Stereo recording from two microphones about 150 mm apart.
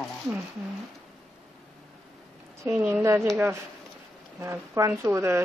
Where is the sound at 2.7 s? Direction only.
15° right (ahead or behind).